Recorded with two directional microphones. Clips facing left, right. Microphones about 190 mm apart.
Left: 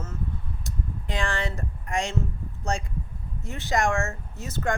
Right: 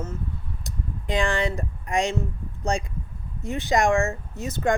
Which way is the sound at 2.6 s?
15° right (ahead or behind).